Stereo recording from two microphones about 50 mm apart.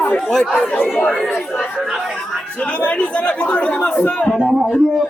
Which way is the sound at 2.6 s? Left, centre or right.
Left.